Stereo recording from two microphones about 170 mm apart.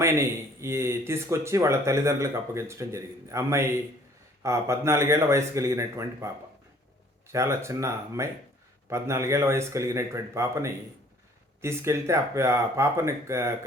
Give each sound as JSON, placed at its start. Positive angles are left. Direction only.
{"t": 0.0, "sound": "speech", "side_deg": -15}
{"t": 7.3, "sound": "speech", "side_deg": -15}